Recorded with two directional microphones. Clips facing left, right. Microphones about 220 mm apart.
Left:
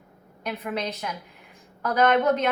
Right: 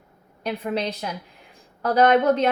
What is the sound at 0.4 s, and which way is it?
A woman's voice, 30° right (ahead or behind).